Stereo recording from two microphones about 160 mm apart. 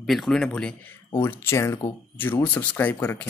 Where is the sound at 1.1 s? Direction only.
15° left (ahead or behind).